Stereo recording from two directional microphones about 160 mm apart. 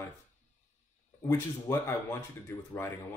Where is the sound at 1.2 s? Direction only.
15° left (ahead or behind).